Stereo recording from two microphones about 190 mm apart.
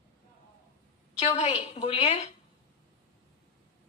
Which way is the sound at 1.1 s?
35° left (ahead or behind).